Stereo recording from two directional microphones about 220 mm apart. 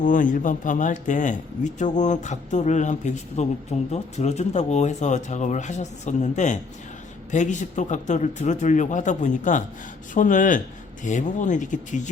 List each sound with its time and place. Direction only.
0.0 s speech: 35° left (ahead or behind)